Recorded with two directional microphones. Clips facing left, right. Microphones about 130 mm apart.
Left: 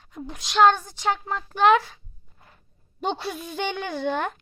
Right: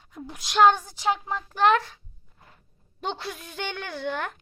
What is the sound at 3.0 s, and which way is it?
A woman's voice, 15° left (ahead or behind).